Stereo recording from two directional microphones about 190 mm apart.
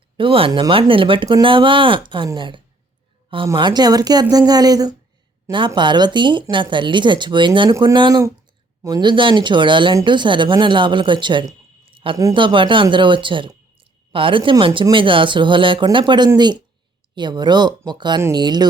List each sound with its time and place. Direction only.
0.2 s speech: 30° right (ahead or behind)
11.4 s a sound: 30° right (ahead or behind)
12.1 s speech: 20° right (ahead or behind)